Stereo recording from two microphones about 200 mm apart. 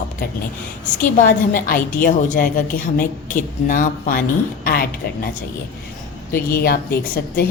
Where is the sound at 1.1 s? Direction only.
40° left (ahead or behind).